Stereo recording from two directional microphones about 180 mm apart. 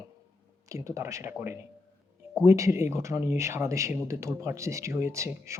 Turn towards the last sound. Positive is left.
turn(degrees=-15)  # may be behind; listen again after turning